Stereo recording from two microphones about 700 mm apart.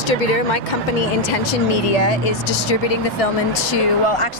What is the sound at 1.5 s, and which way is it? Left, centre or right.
Speech, left.